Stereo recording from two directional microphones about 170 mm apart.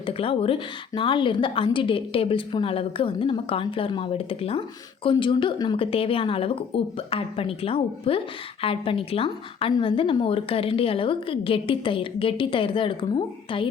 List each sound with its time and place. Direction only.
0.0 s a woman's voice: 35° left (ahead or behind)